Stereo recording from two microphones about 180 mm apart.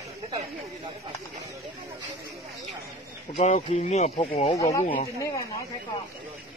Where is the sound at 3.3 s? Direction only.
40° left (ahead or behind).